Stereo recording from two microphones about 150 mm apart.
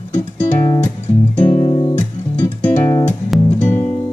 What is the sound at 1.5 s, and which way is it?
Music, 25° left (ahead or behind).